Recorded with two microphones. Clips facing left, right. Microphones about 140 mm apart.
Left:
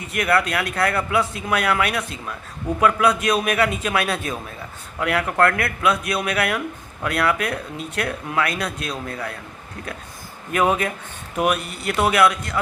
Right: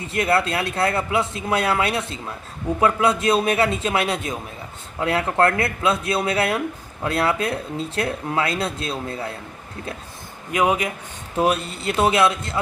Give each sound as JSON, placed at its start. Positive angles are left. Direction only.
{"t": 0.0, "sound": "speech", "side_deg": -25}
{"t": 10.5, "sound": "a man's voice", "side_deg": -15}
{"t": 11.3, "sound": "speech", "side_deg": -30}